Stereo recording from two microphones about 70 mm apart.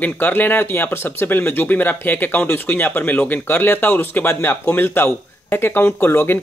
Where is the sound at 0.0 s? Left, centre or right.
Left.